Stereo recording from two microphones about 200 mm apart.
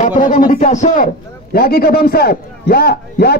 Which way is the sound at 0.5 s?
35° left (ahead or behind).